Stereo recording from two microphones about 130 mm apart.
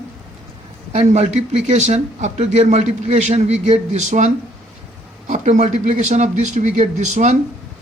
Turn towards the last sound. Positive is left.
turn(degrees=-60)  # may be behind; listen again after turning